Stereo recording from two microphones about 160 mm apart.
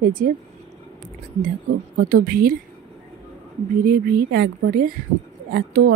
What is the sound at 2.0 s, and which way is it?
Speech, 60° right (ahead or behind).